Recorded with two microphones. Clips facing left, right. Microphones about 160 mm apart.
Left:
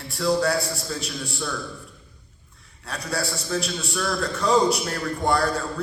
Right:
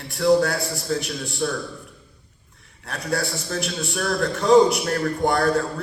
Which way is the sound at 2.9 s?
50° right (ahead or behind).